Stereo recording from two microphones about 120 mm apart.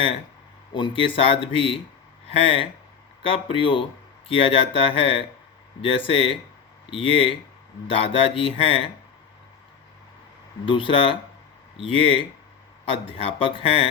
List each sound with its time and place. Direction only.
0.7 s speech: 45° left (ahead or behind)
10.7 s speech: 45° left (ahead or behind)